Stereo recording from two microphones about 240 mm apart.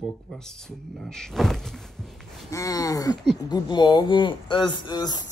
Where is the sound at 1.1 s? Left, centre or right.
Centre.